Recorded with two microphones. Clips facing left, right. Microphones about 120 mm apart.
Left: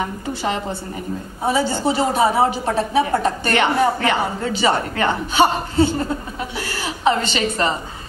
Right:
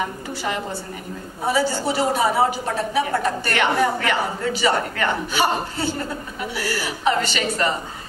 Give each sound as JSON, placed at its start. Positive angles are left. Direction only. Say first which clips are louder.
{"t": 0.3, "sound": "a woman's voice", "louder": "left 3 dB", "side_deg": 25}